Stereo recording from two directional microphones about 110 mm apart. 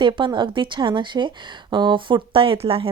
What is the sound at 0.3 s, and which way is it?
A woman's voice, 45° right (ahead or behind).